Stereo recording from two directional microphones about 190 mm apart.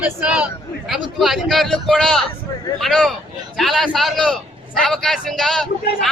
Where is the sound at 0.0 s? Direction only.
5° right (ahead or behind).